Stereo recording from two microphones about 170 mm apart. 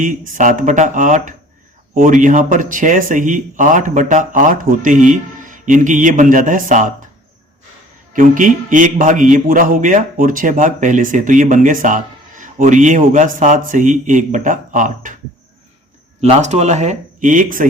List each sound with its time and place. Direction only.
0.0 s a man's voice: 50° right (ahead or behind)
8.1 s a man's voice: 50° right (ahead or behind)
16.2 s a man's voice: 40° right (ahead or behind)